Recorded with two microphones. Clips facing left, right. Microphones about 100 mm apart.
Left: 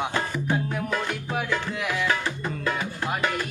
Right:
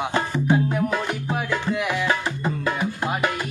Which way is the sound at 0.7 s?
10° right (ahead or behind).